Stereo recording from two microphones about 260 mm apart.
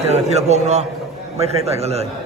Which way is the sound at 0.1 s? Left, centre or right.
Right.